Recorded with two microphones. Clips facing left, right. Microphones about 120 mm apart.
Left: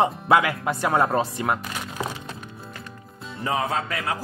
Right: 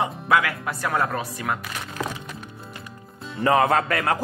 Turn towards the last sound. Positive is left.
turn(degrees=-60)  # may be behind; listen again after turning